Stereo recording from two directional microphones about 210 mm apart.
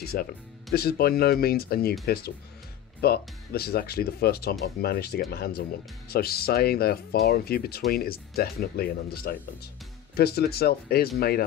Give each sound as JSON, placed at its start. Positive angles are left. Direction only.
{"t": 0.0, "sound": "speech", "side_deg": 45}
{"t": 3.0, "sound": "speech", "side_deg": 50}